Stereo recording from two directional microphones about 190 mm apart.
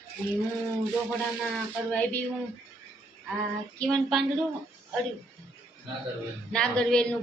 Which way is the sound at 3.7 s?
Centre (ahead or behind).